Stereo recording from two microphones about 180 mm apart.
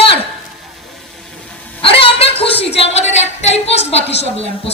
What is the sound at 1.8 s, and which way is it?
A woman's voice, 30° left (ahead or behind).